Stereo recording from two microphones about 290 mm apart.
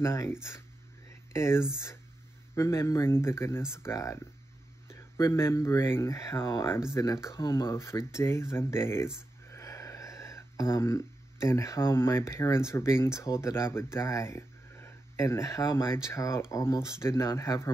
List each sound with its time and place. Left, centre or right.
0.0 s speech: centre